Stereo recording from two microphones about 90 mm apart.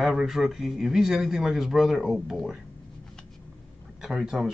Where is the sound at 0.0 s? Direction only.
Centre (ahead or behind).